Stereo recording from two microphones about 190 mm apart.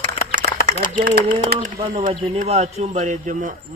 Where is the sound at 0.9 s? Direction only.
50° right (ahead or behind).